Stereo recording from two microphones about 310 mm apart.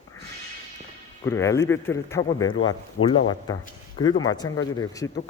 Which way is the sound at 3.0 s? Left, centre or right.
Left.